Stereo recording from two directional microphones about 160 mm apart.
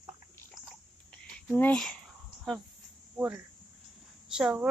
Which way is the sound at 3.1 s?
10° right (ahead or behind).